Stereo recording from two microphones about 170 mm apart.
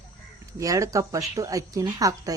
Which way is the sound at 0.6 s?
20° right (ahead or behind).